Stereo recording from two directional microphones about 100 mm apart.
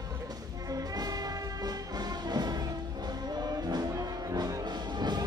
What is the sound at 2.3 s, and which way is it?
Music, 40° right (ahead or behind).